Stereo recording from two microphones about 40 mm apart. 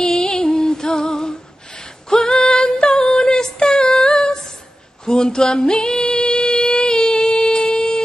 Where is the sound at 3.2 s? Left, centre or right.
Centre.